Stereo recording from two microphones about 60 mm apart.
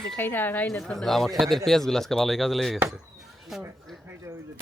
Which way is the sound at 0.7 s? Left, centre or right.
Centre.